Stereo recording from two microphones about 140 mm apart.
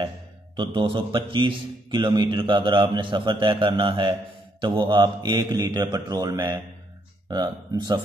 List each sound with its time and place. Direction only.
0.6 s a man's voice: 35° right (ahead or behind)